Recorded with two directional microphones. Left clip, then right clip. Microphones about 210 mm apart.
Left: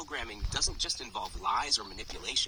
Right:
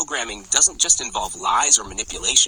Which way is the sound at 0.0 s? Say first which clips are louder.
Right 13 dB; 40° right (ahead or behind).